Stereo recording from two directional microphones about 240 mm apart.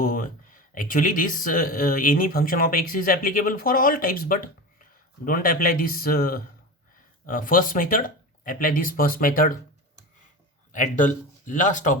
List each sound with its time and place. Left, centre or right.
0.0 s speech: left
10.7 s speech: left